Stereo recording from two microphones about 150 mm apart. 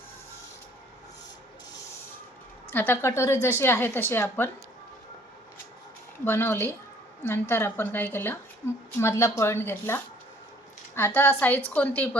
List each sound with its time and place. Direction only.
2.6 s a woman's voice: 15° left (ahead or behind)
6.2 s a woman's voice: 15° left (ahead or behind)